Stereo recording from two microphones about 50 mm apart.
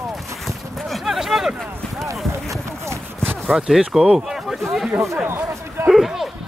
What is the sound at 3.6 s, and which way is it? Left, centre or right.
Speech, centre.